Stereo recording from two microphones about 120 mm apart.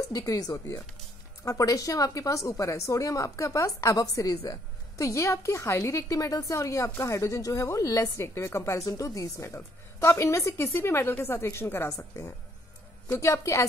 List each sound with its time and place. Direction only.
0.1 s a woman's voice: 30° left (ahead or behind)